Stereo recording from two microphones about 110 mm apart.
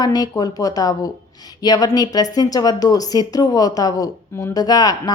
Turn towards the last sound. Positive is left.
turn(degrees=35)  # may be behind; listen again after turning